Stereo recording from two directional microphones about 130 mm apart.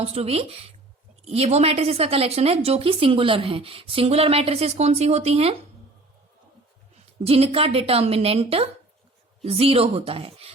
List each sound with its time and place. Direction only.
0.0 s a woman's voice: 50° right (ahead or behind)
7.3 s a woman's voice: 50° right (ahead or behind)